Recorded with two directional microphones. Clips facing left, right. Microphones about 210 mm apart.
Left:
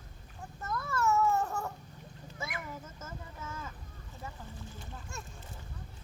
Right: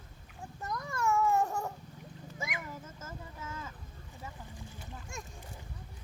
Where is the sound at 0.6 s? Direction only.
15° right (ahead or behind).